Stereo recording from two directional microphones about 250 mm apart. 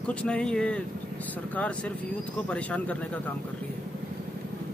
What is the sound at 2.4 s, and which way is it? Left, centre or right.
Speech, centre.